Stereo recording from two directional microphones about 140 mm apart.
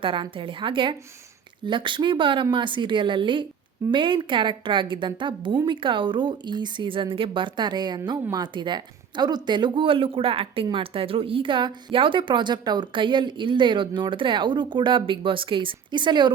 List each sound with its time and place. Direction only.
0.0 s speech: 35° right (ahead or behind)